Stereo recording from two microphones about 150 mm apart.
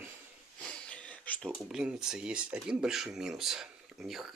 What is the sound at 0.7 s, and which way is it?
Speech, 5° left (ahead or behind).